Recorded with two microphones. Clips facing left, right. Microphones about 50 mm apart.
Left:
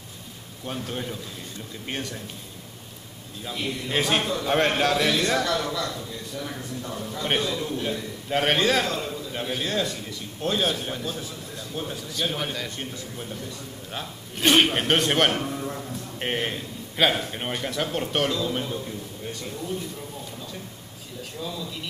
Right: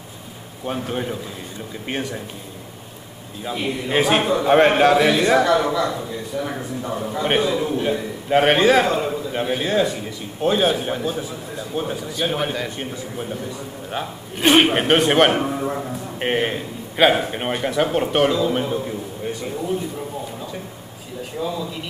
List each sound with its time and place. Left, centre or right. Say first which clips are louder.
0.7 s a man's voice: right 7 dB; centre
3.4 s a man's voice: right 6 dB; centre
21.2 s speech: right 8 dB; centre